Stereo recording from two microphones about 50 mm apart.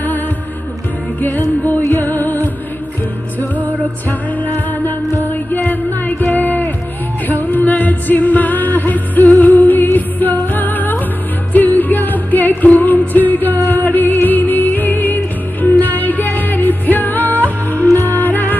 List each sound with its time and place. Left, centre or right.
1.2 s music: left
5.5 s music: left